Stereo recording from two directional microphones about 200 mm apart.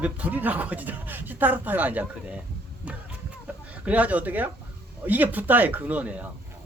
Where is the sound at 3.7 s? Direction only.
5° right (ahead or behind).